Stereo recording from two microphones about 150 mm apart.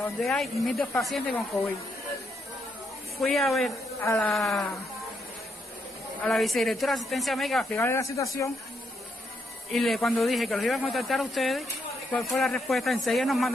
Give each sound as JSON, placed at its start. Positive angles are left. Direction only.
{"t": 0.2, "sound": "speech", "side_deg": 0}
{"t": 3.2, "sound": "speech", "side_deg": 0}
{"t": 6.2, "sound": "speech", "side_deg": 0}
{"t": 7.7, "sound": "speech", "side_deg": 20}
{"t": 9.7, "sound": "speech", "side_deg": 0}